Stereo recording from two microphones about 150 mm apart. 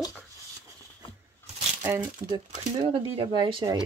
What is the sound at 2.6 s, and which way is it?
Speech, 35° right (ahead or behind).